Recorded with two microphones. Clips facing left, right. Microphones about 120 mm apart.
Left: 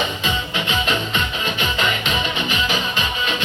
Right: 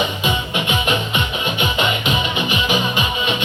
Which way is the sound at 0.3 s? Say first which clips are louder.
Right 3 dB; 15° right (ahead or behind).